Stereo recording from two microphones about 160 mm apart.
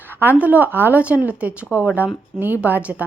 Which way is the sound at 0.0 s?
10° right (ahead or behind).